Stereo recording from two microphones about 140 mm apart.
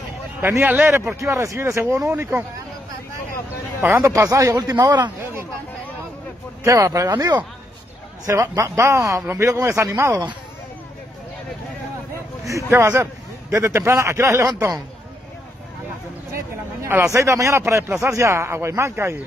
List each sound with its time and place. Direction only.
0.4 s a man's voice: 15° right (ahead or behind)
3.8 s a man's voice: 20° right (ahead or behind)
6.6 s a man's voice: 20° right (ahead or behind)
12.4 s a man's voice: 20° right (ahead or behind)
16.3 s a man's voice: 20° right (ahead or behind)